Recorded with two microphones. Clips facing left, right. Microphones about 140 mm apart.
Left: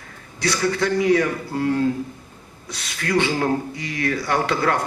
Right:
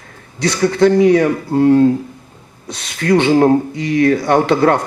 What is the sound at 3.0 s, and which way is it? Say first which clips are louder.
Speech: right 10 dB; 35° right (ahead or behind).